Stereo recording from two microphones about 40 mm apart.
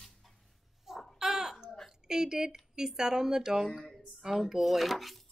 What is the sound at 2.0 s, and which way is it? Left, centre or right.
Speech, centre.